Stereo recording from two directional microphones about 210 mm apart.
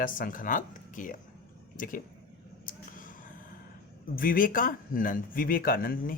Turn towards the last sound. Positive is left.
turn(degrees=45)  # may be behind; listen again after turning